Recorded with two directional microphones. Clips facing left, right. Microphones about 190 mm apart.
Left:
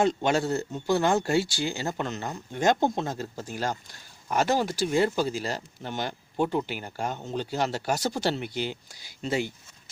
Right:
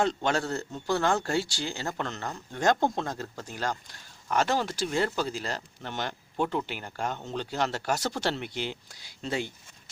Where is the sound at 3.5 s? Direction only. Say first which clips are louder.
Left 1 dB; 10° left (ahead or behind).